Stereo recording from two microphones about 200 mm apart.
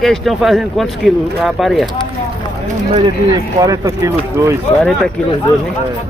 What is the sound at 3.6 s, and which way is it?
Speech, 15° right (ahead or behind).